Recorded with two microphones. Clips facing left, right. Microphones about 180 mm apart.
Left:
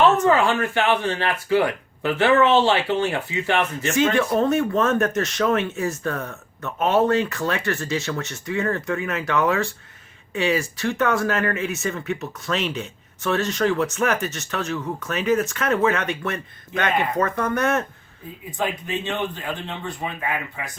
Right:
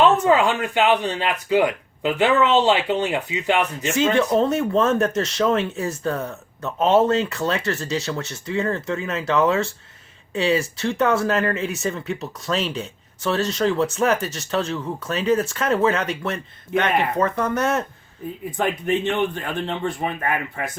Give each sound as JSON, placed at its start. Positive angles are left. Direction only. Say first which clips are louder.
{"t": 0.0, "sound": "speech", "louder": "right 1 dB", "side_deg": -15}
{"t": 4.4, "sound": "speech", "louder": "right 1 dB", "side_deg": -30}
{"t": 18.5, "sound": "a man's voice", "louder": "right 4 dB", "side_deg": -60}